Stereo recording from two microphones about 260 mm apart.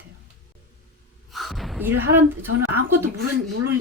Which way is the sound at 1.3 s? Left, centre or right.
Centre.